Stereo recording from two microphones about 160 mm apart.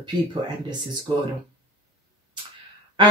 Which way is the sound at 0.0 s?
30° right (ahead or behind).